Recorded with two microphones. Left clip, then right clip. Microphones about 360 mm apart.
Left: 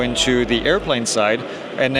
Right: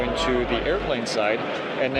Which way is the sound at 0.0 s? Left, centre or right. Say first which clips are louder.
Left 5 dB; left.